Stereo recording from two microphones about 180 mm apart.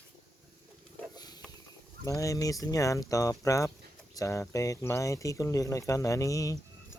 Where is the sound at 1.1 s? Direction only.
20° left (ahead or behind).